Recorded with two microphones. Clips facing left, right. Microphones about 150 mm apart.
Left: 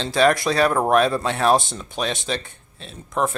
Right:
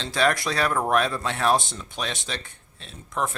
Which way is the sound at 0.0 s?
30° left (ahead or behind).